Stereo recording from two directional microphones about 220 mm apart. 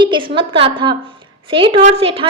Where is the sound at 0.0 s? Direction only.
20° right (ahead or behind).